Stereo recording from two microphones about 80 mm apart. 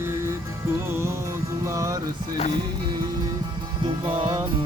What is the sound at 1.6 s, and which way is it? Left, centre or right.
Music, right.